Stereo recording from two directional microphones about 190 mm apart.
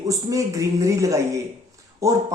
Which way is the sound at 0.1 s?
15° right (ahead or behind).